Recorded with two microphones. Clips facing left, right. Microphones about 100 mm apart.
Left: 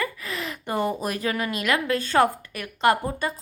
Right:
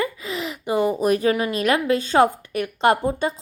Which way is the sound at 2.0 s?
20° right (ahead or behind).